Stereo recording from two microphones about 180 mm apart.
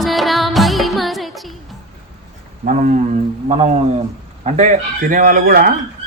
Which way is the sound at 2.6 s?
45° right (ahead or behind).